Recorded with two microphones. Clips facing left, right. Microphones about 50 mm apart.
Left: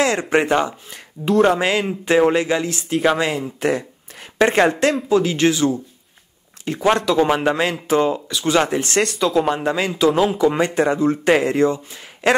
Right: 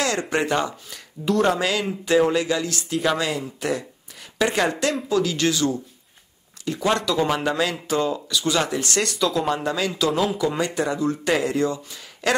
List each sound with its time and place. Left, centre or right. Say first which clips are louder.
0.0 s speech: left 5 dB; left
3.3 s speech: left 5 dB; left